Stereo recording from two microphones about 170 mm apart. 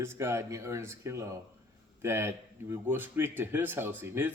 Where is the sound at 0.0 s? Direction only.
15° right (ahead or behind).